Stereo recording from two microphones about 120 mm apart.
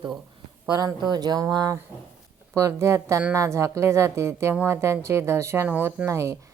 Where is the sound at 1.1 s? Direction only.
35° right (ahead or behind); by 6.1 s 10° right (ahead or behind).